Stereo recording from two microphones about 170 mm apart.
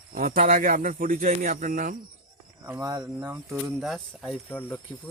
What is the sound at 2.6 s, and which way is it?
Speech, 20° right (ahead or behind).